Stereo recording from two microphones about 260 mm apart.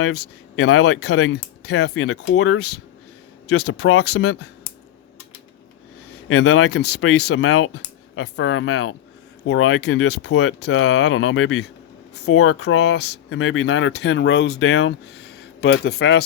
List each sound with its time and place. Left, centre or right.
0.0 s speech: left
6.2 s speech: left
7.2 s speech: left
7.4 s speech: left
10.6 s speech: left
12.8 s speech: left
14.7 s speech: left
15.4 s a sound: left
16.0 s speech: left